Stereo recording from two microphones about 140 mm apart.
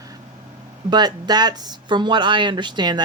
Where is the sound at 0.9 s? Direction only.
30° right (ahead or behind).